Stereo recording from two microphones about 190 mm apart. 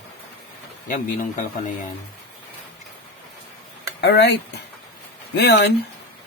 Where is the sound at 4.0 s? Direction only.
60° left (ahead or behind).